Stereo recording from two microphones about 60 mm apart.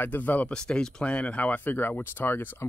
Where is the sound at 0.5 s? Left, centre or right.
Centre.